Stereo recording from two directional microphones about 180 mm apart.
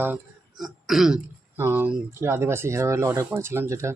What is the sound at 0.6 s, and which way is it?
Speech, centre (ahead or behind).